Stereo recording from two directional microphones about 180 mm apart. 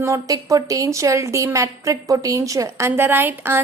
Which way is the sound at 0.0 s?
20° right (ahead or behind).